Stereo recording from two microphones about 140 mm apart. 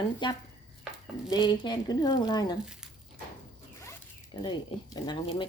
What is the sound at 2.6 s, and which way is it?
Speech, 5° right (ahead or behind).